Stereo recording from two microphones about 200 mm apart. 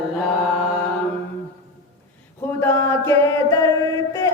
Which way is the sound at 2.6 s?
10° left (ahead or behind).